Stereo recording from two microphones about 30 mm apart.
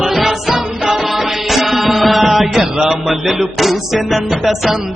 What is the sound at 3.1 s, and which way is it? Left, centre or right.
A man's voice, centre.